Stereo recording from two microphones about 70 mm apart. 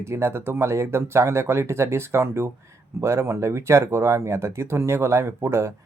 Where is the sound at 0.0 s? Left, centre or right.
Right.